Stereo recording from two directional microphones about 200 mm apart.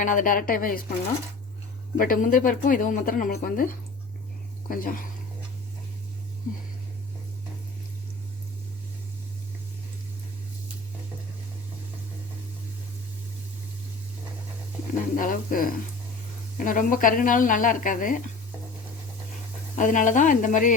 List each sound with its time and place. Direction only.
0.0 s speech: 40° left (ahead or behind)
2.0 s speech: 45° left (ahead or behind)
15.1 s speech: 45° left (ahead or behind)
19.7 s speech: 40° left (ahead or behind)